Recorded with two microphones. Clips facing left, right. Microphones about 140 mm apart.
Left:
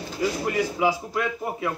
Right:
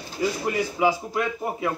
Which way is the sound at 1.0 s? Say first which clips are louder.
Right 1 dB; 15° right (ahead or behind).